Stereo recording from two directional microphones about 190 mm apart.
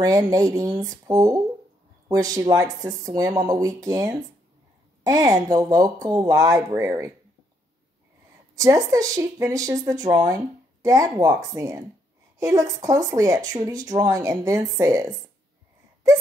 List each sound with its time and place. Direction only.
0.0 s speech: 20° right (ahead or behind)
8.5 s speech: 15° right (ahead or behind)